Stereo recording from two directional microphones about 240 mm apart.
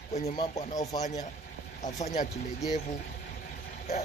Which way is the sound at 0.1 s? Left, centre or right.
Left.